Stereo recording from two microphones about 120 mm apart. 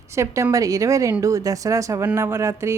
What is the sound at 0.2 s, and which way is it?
Speech, 25° right (ahead or behind).